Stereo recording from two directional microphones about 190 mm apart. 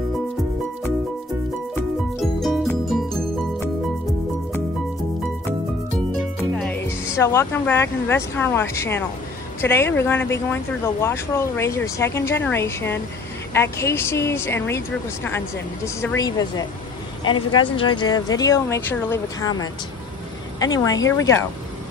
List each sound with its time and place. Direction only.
2.1 s music: centre (ahead or behind)
6.5 s music: 5° left (ahead or behind)
7.2 s speech: 15° left (ahead or behind)